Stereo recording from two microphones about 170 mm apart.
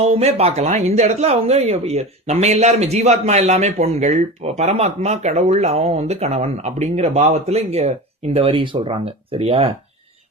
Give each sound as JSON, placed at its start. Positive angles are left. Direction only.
{"t": 0.0, "sound": "speech", "side_deg": -35}